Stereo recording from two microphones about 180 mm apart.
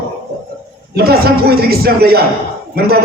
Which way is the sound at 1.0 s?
60° right (ahead or behind).